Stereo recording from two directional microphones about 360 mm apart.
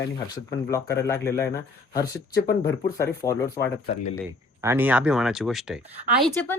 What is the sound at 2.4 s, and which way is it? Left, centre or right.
Speech, left.